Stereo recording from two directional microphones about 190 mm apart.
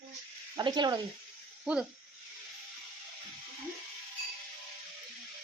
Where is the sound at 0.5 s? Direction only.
20° right (ahead or behind).